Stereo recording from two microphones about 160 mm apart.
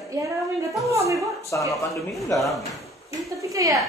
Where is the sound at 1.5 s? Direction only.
15° left (ahead or behind).